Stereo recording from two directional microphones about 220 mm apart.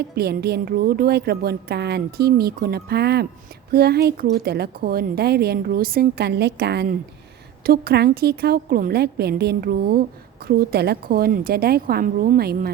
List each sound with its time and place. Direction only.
0.2 s a woman's voice: 45° right (ahead or behind)